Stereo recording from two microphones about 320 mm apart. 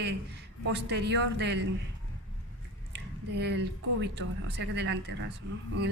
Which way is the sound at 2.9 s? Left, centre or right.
Right.